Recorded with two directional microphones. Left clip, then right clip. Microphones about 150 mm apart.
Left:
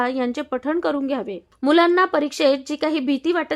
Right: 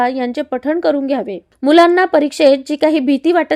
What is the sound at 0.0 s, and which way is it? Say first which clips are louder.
A woman's voice: right 6 dB; 10° right (ahead or behind).